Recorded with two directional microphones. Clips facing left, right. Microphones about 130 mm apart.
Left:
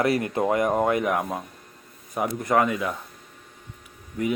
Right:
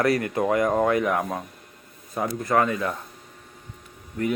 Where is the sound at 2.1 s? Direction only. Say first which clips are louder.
Even; 20° left (ahead or behind).